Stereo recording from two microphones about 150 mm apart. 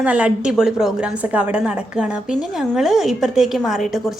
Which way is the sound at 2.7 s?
5° right (ahead or behind).